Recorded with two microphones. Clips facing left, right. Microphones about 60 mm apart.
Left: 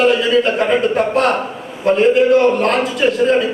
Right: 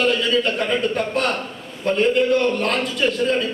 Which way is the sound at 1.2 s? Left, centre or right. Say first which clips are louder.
Left 7 dB; centre.